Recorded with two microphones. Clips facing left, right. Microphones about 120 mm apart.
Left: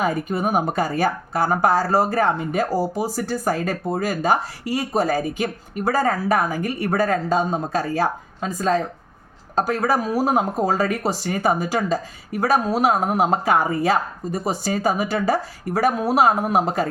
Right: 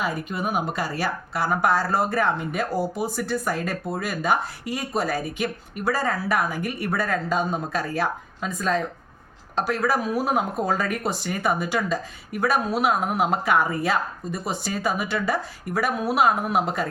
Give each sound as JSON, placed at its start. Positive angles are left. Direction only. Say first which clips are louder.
{"t": 0.0, "sound": "speech", "louder": "left 5 dB", "side_deg": 40}